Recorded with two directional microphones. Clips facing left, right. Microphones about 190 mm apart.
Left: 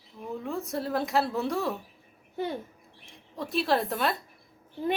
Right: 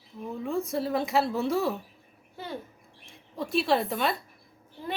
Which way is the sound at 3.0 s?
Centre (ahead or behind).